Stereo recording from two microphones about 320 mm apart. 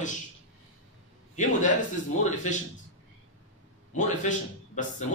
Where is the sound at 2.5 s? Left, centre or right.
Left.